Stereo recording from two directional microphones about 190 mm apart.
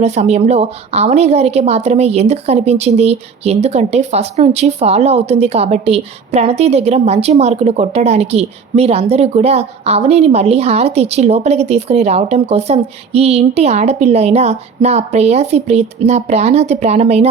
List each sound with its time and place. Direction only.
0.0 s a woman's voice: 35° right (ahead or behind)